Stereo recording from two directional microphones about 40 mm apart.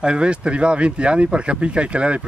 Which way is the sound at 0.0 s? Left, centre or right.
Right.